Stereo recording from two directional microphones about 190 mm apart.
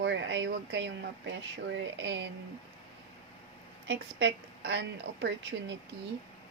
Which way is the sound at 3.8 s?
70° right (ahead or behind).